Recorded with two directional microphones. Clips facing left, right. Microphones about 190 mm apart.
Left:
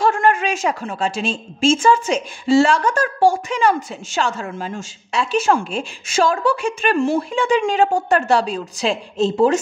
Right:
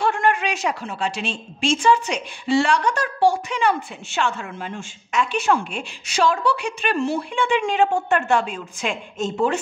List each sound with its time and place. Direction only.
0.0 s a woman's voice: 45° left (ahead or behind)